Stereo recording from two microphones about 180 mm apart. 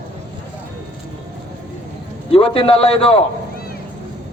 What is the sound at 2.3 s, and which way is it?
Speech, 30° left (ahead or behind).